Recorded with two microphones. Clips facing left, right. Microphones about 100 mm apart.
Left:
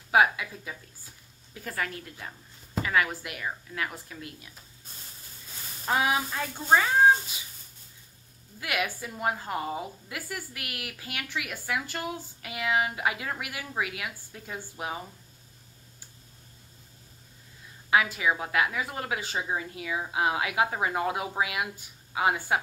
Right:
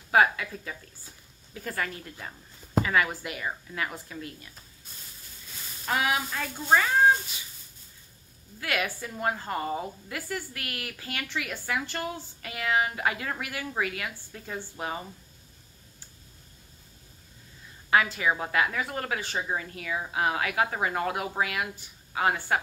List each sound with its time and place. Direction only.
0.1 s a woman's voice: 5° left (ahead or behind)
5.9 s speech: 25° left (ahead or behind)
8.5 s a woman's voice: 10° left (ahead or behind)
17.8 s a woman's voice: 5° left (ahead or behind)